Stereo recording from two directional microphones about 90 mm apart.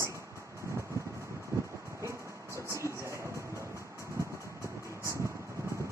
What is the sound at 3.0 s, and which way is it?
Music, 35° right (ahead or behind).